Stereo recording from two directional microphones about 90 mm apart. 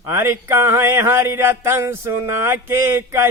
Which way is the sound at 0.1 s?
30° right (ahead or behind).